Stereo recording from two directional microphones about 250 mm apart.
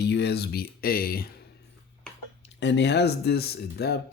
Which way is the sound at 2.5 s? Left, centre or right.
Left.